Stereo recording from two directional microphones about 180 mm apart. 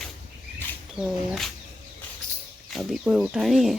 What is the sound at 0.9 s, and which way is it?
Speech, 5° right (ahead or behind).